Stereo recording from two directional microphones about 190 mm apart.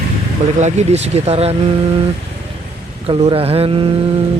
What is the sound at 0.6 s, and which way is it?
Speech, 35° right (ahead or behind).